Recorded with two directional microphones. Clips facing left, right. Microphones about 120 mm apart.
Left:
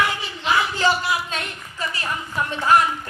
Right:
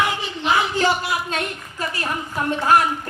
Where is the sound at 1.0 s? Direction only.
45° right (ahead or behind).